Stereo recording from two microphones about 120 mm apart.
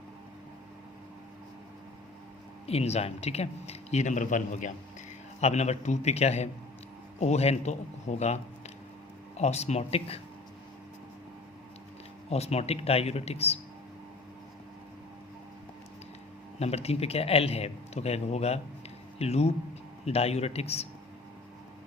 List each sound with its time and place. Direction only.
2.6 s a man's voice: 60° left (ahead or behind); by 4.7 s 90° left
5.4 s a man's voice: 65° left (ahead or behind)
9.4 s a man's voice: 65° left (ahead or behind)
12.3 s a man's voice: 60° left (ahead or behind)
16.6 s a man's voice: 60° left (ahead or behind)